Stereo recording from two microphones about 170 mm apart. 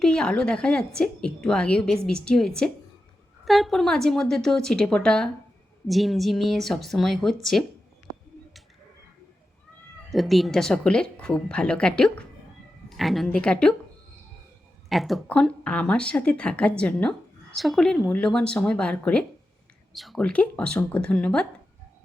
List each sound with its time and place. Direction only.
0.0 s a woman's voice: 5° left (ahead or behind)
10.1 s a woman's voice: centre (ahead or behind)
14.8 s a woman's voice: centre (ahead or behind)